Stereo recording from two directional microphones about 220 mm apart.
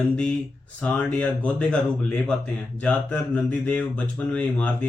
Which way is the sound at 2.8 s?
5° left (ahead or behind).